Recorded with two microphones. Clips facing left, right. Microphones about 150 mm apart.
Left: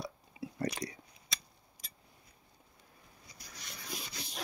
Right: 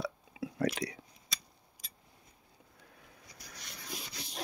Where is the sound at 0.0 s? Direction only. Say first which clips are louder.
Right 4 dB; 90° right.